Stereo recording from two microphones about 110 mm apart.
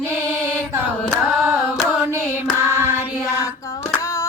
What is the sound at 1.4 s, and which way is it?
Carnatic music, 5° right (ahead or behind).